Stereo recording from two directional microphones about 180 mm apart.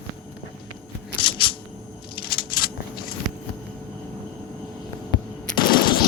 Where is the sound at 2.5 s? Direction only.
55° left (ahead or behind).